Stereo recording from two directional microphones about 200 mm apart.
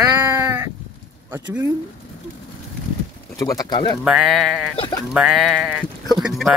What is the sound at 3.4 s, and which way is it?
Speech, 20° left (ahead or behind).